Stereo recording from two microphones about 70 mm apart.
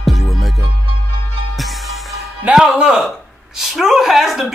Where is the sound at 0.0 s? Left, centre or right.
Centre.